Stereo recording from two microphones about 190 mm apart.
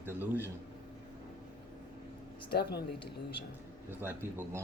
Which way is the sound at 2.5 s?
55° left (ahead or behind).